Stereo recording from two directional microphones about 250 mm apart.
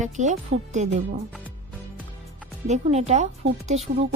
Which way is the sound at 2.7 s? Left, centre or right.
Right.